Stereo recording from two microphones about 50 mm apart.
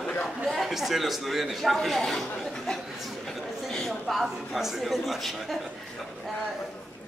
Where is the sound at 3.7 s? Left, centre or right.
Centre.